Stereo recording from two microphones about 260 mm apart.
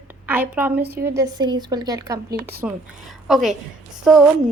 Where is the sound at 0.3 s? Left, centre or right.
Centre.